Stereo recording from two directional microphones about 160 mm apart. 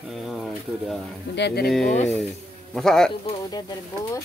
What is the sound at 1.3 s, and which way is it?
Speech, 85° left.